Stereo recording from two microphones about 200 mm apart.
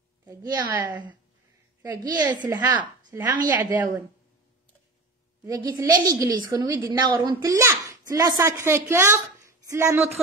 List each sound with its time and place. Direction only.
0.2 s a woman's voice: 15° right (ahead or behind)
5.4 s a woman's voice: 20° right (ahead or behind)